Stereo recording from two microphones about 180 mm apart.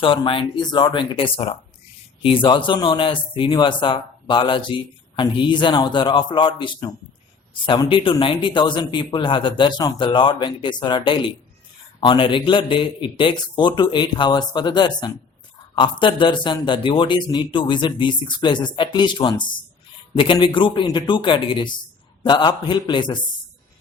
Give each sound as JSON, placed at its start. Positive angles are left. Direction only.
{"t": 0.0, "sound": "speech", "side_deg": 30}